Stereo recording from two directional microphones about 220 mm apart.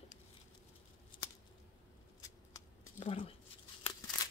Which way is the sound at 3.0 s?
25° left (ahead or behind).